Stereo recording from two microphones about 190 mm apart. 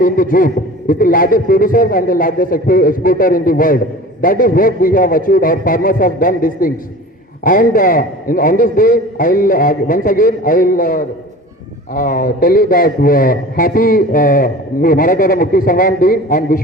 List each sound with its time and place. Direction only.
0.0 s speech: 45° left (ahead or behind)